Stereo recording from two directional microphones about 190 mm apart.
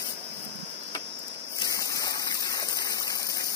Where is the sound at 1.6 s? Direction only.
20° left (ahead or behind).